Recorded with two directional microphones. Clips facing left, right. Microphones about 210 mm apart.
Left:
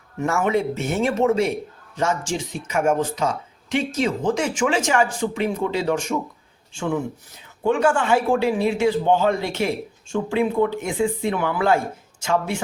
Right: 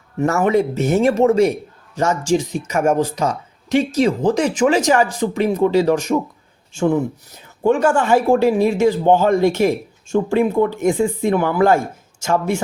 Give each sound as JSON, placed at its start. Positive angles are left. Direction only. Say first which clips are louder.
{"t": 0.2, "sound": "speech", "louder": "right 5 dB", "side_deg": -40}